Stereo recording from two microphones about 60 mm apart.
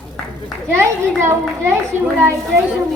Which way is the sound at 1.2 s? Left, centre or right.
Right.